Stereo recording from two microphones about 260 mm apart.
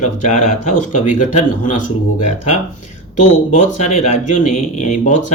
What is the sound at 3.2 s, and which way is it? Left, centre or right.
Speech, left.